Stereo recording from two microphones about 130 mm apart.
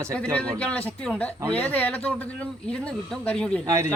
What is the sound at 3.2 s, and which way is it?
Speech, 10° left (ahead or behind).